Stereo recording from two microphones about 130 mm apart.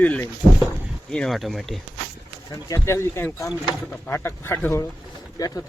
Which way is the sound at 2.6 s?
20° left (ahead or behind).